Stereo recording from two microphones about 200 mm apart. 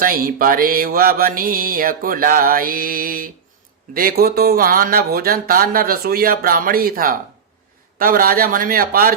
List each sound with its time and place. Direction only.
0.0 s speech: 45° right (ahead or behind)